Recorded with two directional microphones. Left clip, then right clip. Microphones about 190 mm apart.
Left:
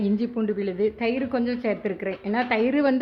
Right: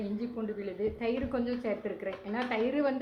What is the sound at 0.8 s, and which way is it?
A woman's voice, 25° left (ahead or behind).